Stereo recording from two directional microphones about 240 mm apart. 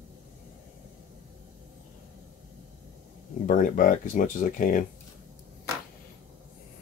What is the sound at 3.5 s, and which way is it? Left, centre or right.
Speech, left.